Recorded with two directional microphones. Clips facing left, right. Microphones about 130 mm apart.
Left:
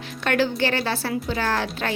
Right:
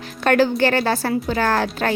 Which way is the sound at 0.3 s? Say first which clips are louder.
Right 5 dB; 45° right (ahead or behind).